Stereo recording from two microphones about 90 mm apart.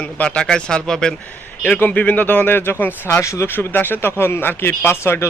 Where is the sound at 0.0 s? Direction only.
15° left (ahead or behind).